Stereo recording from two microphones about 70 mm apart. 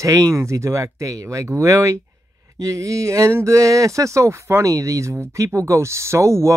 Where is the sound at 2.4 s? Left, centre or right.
Right.